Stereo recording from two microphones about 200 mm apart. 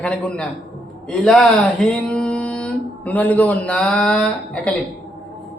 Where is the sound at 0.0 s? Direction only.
5° left (ahead or behind).